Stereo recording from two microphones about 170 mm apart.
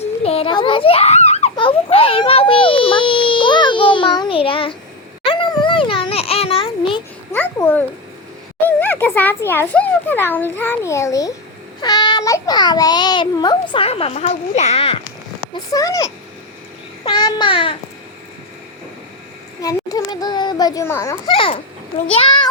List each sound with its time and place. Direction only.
0.0 s a sound: 35° left (ahead or behind)
7.3 s a child's voice: 10° left (ahead or behind); by 15.0 s 35° left (ahead or behind)
15.7 s a child's voice: 20° left (ahead or behind)
17.0 s babbling: 25° left (ahead or behind)
19.6 s a child's voice: 20° left (ahead or behind)
21.2 s a child's voice: 30° left (ahead or behind)